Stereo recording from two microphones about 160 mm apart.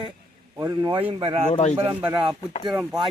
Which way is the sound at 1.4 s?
45° left (ahead or behind).